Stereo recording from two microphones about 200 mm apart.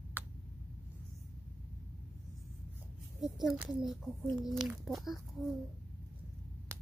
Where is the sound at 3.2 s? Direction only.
Centre (ahead or behind).